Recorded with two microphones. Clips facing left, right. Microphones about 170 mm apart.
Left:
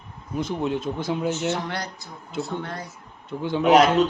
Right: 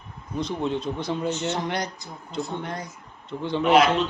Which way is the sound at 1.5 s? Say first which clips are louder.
Even; 20° right (ahead or behind).